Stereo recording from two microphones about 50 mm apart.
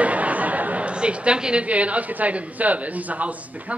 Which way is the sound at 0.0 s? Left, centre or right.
Right.